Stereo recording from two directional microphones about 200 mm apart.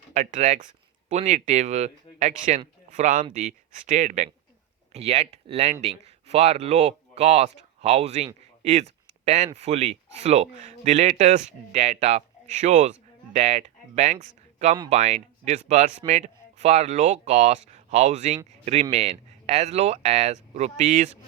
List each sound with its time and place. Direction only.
0.1 s speech: 35° right (ahead or behind)